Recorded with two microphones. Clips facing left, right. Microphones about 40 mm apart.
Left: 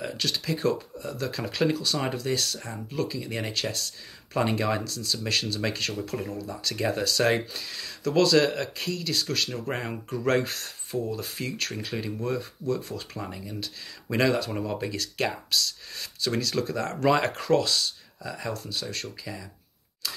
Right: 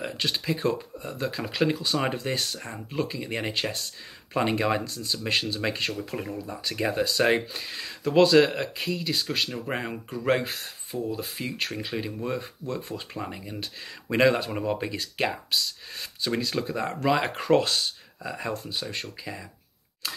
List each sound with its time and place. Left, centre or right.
0.0 s speech: right
17.0 s speech: centre
17.3 s speech: right
17.6 s speech: right